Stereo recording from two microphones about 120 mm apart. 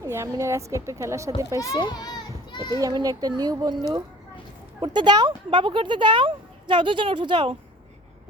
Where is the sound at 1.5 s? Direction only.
30° left (ahead or behind).